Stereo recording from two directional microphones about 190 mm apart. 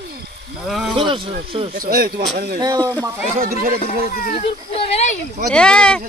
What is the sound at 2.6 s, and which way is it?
Speech, 20° right (ahead or behind).